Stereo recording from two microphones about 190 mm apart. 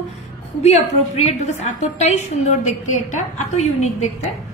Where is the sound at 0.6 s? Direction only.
35° left (ahead or behind).